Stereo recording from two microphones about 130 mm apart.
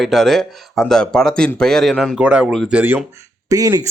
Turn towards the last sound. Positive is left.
turn(degrees=-30)  # may be behind; listen again after turning